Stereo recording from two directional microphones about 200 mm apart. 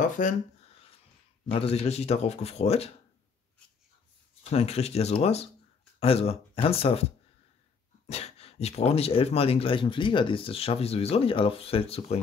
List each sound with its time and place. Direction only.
0.0 s speech: 40° left (ahead or behind)
1.5 s speech: 30° left (ahead or behind)
4.4 s a man's voice: 30° left (ahead or behind)
8.1 s a man's voice: 30° left (ahead or behind)